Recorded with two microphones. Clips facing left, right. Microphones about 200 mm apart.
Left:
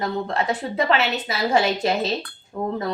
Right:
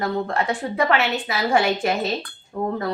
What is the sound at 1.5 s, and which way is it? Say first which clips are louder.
Speech: even; 20° left (ahead or behind).